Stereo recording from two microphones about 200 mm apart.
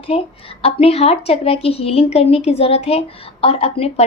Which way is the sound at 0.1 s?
30° left (ahead or behind).